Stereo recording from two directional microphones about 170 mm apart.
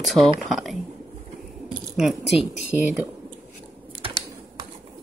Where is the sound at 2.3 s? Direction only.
5° right (ahead or behind).